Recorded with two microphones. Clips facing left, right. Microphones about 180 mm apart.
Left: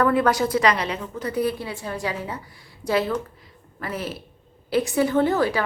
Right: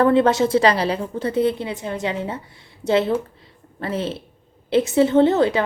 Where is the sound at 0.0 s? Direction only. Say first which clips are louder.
Right 4 dB; 25° right (ahead or behind).